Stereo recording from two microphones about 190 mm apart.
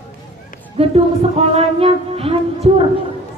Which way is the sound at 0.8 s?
30° right (ahead or behind).